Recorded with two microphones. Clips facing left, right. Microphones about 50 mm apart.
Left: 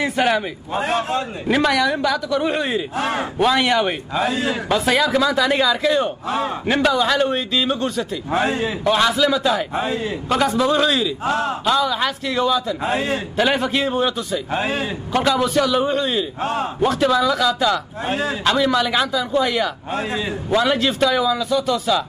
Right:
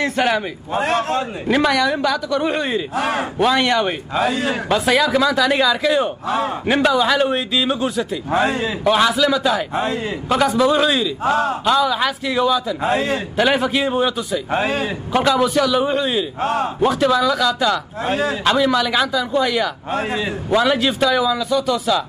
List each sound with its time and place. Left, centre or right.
0.0 s speech: centre
12.8 s a man's voice: right
13.4 s speech: centre
16.3 s speech: right
16.8 s speech: centre